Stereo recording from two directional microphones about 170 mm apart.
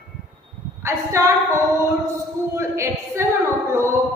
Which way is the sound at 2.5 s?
15° right (ahead or behind).